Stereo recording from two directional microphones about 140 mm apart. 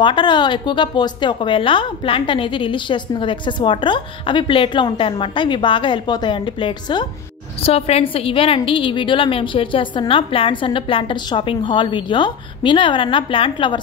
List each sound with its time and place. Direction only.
0.0 s a woman's voice: 35° left (ahead or behind)
7.6 s a woman's voice: 45° left (ahead or behind)